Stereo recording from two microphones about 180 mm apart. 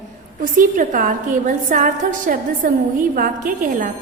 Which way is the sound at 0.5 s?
50° right (ahead or behind).